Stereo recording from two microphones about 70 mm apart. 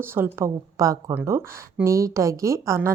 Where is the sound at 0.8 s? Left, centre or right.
Right.